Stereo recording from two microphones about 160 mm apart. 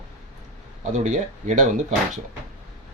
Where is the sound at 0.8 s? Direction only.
45° right (ahead or behind).